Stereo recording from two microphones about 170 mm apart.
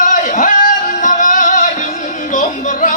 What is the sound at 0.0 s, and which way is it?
Music, 50° left (ahead or behind).